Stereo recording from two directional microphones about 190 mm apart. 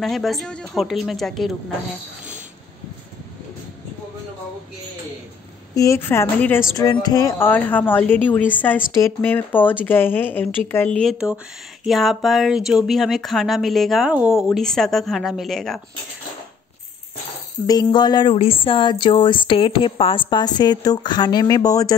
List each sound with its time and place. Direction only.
0.0 s speech: centre (ahead or behind)
5.8 s speech: 15° left (ahead or behind)
17.6 s a sound: 20° left (ahead or behind)